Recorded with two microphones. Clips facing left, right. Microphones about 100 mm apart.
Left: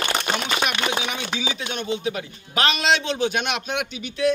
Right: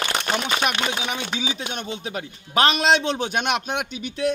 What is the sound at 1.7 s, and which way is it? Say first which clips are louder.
A man's voice: left 4 dB; 45° right (ahead or behind).